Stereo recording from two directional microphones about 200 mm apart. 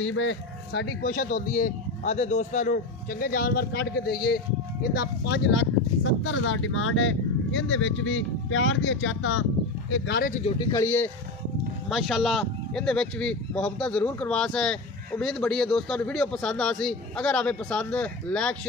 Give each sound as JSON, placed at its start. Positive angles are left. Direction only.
{"t": 0.0, "sound": "speech", "side_deg": 70}
{"t": 1.0, "sound": "speech", "side_deg": 40}
{"t": 10.6, "sound": "speech", "side_deg": 15}
{"t": 11.9, "sound": "speech", "side_deg": 0}